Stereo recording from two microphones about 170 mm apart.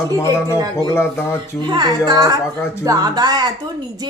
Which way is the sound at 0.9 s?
15° left (ahead or behind).